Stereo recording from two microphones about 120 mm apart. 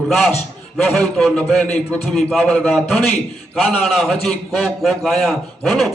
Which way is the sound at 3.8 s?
Centre (ahead or behind).